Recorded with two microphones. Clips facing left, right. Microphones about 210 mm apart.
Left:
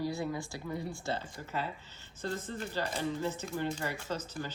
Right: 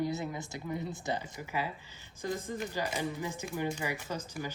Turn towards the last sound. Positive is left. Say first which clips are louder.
# even
turn(degrees=-10)  # may be behind; listen again after turning